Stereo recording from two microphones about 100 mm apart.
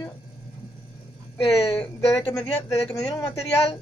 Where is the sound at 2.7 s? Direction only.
35° left (ahead or behind).